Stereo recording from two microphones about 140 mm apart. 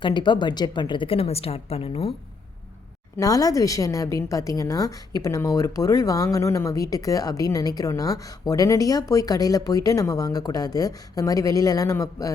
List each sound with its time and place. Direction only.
0.0 s a woman's voice: 35° left (ahead or behind)
3.2 s a woman's voice: 25° left (ahead or behind)